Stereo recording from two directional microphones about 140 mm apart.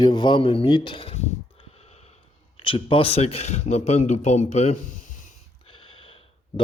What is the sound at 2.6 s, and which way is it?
Speech, 40° left (ahead or behind).